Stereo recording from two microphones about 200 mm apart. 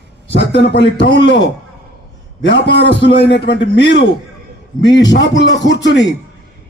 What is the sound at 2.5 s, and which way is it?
A man's voice, 60° left (ahead or behind).